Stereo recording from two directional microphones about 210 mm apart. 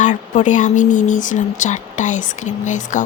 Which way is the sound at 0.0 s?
35° left (ahead or behind).